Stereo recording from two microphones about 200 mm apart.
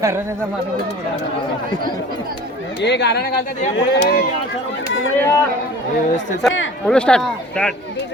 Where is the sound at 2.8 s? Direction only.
60° left (ahead or behind).